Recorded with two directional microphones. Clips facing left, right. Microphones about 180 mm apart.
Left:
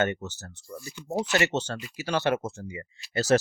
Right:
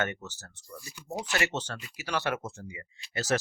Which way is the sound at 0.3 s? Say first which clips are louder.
Left 5 dB; 25° left (ahead or behind).